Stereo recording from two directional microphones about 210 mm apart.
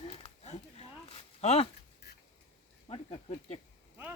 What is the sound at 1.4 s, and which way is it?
Speech, 30° left (ahead or behind).